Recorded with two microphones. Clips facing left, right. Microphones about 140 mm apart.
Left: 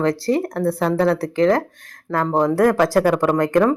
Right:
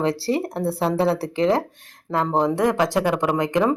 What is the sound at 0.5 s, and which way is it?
Speech, 30° right (ahead or behind).